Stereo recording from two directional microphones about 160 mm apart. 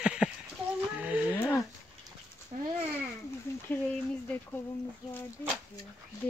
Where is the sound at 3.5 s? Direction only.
15° left (ahead or behind).